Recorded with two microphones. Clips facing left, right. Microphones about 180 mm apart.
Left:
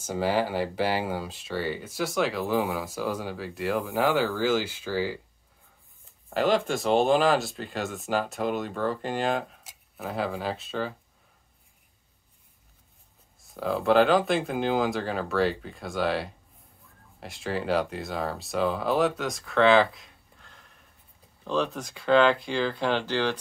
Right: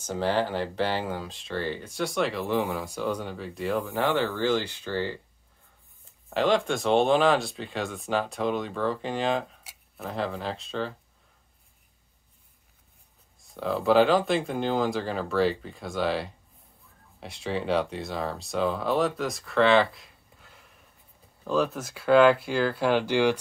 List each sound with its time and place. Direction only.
0.0 s speech: 10° left (ahead or behind)
6.3 s speech: 5° left (ahead or behind)
13.4 s speech: centre (ahead or behind)